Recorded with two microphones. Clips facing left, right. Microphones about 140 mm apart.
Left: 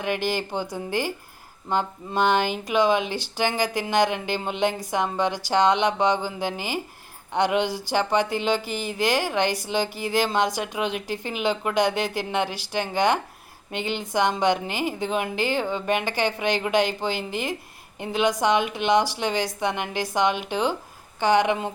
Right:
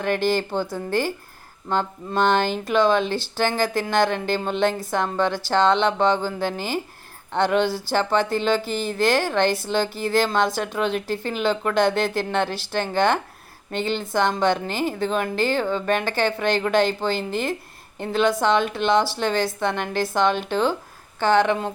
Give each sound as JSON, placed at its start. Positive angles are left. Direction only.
{"t": 0.0, "sound": "speech", "side_deg": 15}